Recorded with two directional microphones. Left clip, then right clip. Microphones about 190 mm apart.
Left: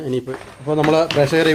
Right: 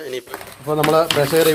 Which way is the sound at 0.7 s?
10° left (ahead or behind).